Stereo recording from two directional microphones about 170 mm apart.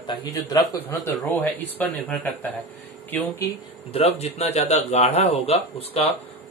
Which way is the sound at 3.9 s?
40° left (ahead or behind).